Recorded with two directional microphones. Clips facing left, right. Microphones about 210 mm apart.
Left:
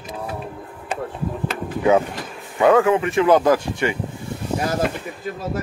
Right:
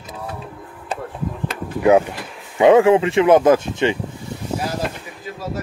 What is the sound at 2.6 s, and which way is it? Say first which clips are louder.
Speech: right 4 dB; 25° right (ahead or behind).